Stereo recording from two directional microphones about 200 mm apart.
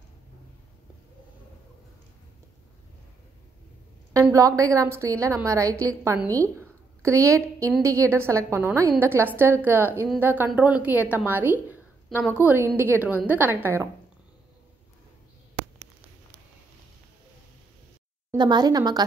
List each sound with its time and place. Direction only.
4.1 s a woman's voice: 15° right (ahead or behind)
18.3 s speech: 20° right (ahead or behind)